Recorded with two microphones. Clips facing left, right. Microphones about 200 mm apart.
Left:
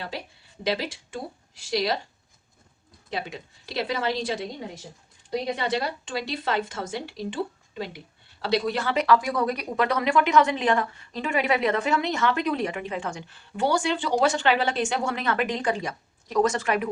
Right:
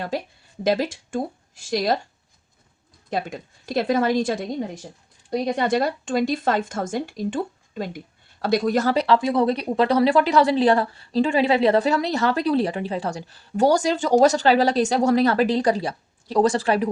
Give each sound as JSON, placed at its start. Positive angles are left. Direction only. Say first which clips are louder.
{"t": 0.1, "sound": "a woman's voice", "louder": "right 8 dB", "side_deg": -45}
{"t": 3.1, "sound": "a woman's voice", "louder": "right 5 dB", "side_deg": -50}